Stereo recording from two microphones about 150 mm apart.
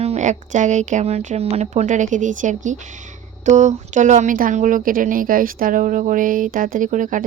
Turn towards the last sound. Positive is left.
turn(degrees=-60)  # may be behind; listen again after turning